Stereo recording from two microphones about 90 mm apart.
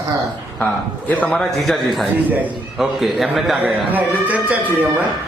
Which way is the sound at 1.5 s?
Centre (ahead or behind).